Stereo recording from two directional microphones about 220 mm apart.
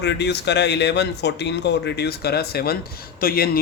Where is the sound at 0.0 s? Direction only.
50° left (ahead or behind).